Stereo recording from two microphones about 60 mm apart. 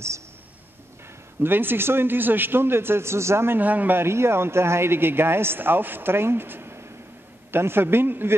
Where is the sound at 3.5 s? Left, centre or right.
Right.